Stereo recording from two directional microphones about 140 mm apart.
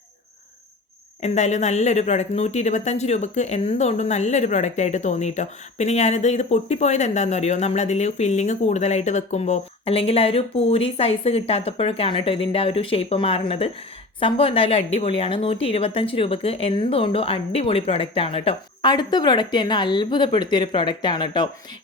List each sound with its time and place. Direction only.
1.2 s speech: 55° left (ahead or behind); by 21.5 s 30° left (ahead or behind)